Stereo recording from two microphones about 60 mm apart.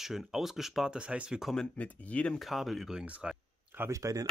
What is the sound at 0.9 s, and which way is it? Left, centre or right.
Speech, centre.